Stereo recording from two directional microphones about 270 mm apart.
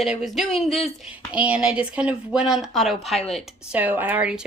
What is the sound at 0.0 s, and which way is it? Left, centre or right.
A woman's voice, centre.